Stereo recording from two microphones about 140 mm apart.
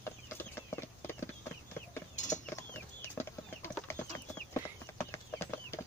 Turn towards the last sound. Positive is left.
turn(degrees=15)  # may be behind; listen again after turning